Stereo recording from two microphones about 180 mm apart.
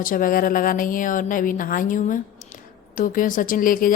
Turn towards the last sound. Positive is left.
turn(degrees=50)  # may be behind; listen again after turning